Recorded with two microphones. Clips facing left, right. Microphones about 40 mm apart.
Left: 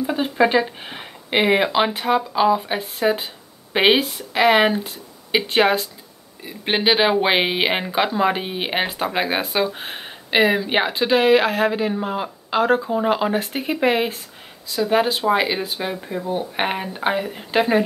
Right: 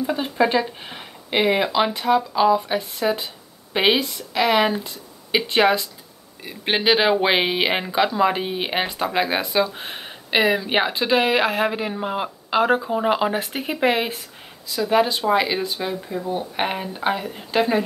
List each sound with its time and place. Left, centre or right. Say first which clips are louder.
0.0 s speech: left 2 dB; centre
5.3 s speech: even; centre
14.8 s speech: even; centre